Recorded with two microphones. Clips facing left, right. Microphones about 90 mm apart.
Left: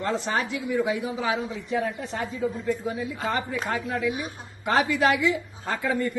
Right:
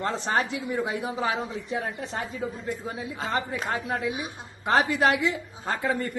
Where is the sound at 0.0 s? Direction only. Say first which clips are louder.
Even; 40° right (ahead or behind).